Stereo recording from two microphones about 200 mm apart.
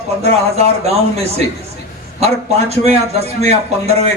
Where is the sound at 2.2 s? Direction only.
30° right (ahead or behind).